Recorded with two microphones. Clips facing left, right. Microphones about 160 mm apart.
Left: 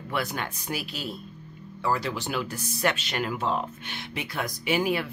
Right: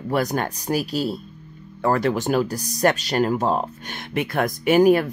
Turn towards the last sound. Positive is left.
turn(degrees=-45)  # may be behind; listen again after turning